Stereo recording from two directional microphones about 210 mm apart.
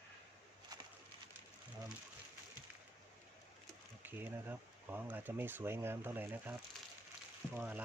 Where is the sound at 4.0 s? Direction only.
10° right (ahead or behind).